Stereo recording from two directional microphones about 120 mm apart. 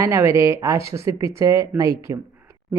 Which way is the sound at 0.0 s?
20° right (ahead or behind).